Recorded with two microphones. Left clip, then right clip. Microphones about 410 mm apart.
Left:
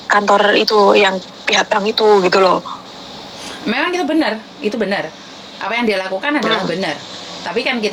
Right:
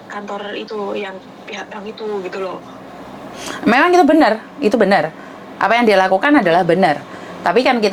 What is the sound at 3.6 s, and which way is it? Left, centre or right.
A woman's voice, right.